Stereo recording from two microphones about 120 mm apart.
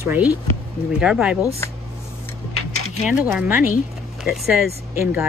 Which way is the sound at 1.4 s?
25° left (ahead or behind).